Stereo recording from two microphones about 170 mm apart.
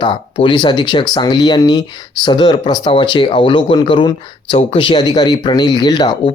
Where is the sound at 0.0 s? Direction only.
30° left (ahead or behind).